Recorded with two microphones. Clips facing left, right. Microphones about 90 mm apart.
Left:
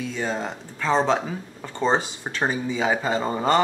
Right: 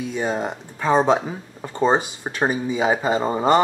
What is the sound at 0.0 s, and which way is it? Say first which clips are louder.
Speech: right 3 dB; 15° right (ahead or behind).